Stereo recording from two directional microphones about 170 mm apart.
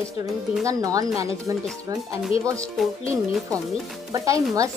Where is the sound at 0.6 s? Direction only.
20° right (ahead or behind).